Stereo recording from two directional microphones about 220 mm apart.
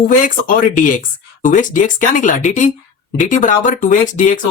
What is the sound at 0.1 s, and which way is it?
Speech, 35° left (ahead or behind).